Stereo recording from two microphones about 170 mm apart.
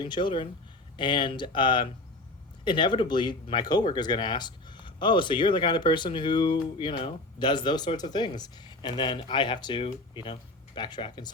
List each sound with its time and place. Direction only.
0.0 s speech: 25° left (ahead or behind)